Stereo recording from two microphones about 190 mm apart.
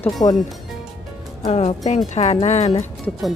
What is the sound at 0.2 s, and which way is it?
Speech, 25° left (ahead or behind).